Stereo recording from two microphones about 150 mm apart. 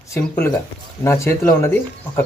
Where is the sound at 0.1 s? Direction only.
20° left (ahead or behind).